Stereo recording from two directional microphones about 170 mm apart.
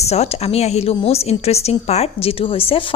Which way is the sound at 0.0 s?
40° left (ahead or behind).